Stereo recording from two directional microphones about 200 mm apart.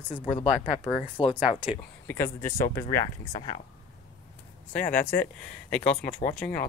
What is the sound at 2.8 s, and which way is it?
Speech, 30° left (ahead or behind).